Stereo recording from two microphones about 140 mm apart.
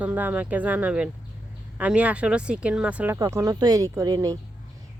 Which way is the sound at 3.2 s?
25° right (ahead or behind).